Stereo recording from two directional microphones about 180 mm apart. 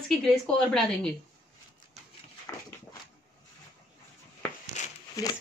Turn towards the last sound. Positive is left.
turn(degrees=20)  # may be behind; listen again after turning